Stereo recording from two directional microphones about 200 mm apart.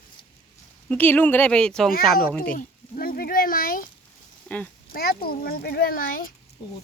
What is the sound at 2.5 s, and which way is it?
A child's voice, 45° left (ahead or behind).